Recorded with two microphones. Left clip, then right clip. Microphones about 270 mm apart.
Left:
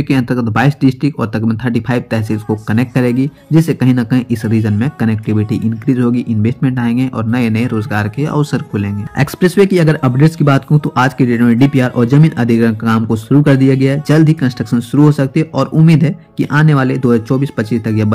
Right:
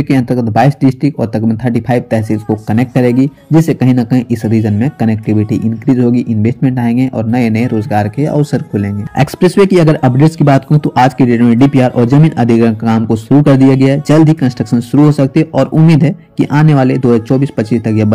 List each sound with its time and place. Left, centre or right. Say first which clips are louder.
1.3 s speech: right 2 dB; centre
4.6 s speech: right 3 dB; left
4.8 s speech: right 3 dB; centre